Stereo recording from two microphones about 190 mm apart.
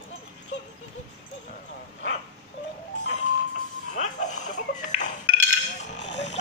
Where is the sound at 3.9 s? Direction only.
40° left (ahead or behind).